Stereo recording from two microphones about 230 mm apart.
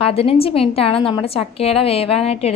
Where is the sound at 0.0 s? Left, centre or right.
Left.